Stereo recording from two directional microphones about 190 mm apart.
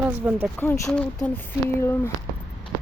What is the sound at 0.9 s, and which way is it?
Speech, 5° left (ahead or behind).